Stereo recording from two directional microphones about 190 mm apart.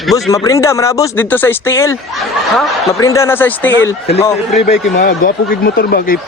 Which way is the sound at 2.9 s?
15° left (ahead or behind).